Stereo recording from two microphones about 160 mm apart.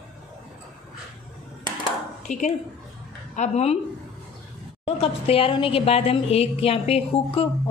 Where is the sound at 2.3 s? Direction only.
45° left (ahead or behind).